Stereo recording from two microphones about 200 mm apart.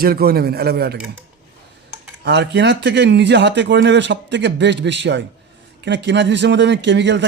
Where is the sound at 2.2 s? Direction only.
60° right (ahead or behind).